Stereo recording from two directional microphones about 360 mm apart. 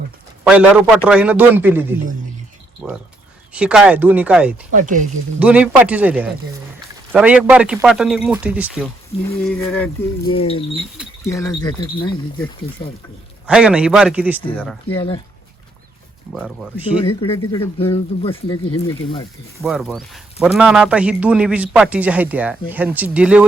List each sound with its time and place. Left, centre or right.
0.4 s a man's voice: centre
2.8 s a man's voice: centre
4.7 s speech: right
5.4 s a man's voice: centre
13.5 s a man's voice: centre
14.9 s speech: centre
16.3 s a man's voice: centre
17.0 s speech: centre
19.6 s a man's voice: centre